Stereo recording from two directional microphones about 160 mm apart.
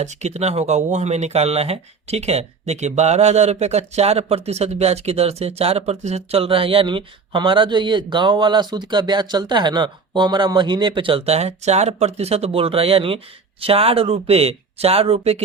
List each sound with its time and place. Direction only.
0.0 s speech: 45° right (ahead or behind)